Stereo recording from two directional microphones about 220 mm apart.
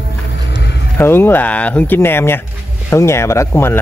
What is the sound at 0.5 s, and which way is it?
Vehicle, 50° left (ahead or behind).